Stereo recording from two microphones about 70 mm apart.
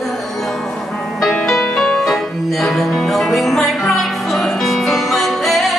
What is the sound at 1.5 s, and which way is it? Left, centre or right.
Music, centre.